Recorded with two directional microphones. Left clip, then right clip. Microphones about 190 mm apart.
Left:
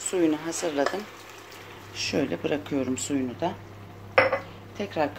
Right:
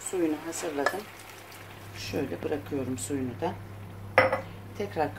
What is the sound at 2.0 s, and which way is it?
Speech, 40° left (ahead or behind).